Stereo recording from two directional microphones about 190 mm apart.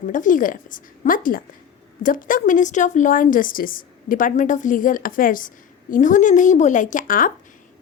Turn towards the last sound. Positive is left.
turn(degrees=45)  # may be behind; listen again after turning